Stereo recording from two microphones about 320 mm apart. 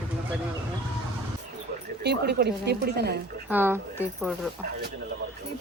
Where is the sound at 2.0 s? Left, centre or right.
Right.